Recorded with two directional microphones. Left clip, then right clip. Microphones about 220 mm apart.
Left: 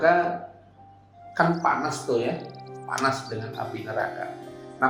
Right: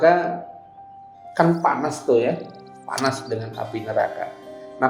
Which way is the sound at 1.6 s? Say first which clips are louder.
Right 4 dB; 35° right (ahead or behind).